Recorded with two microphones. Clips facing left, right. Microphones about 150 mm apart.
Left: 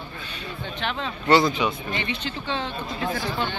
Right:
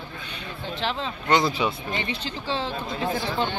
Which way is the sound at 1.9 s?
35° right (ahead or behind).